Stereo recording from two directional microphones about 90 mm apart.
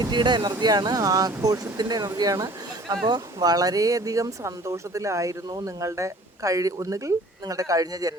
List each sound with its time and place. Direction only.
0.0 s speech: 55° right (ahead or behind); by 8.1 s 40° right (ahead or behind)